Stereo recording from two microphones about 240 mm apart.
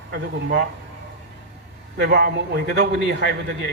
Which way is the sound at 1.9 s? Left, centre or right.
Right.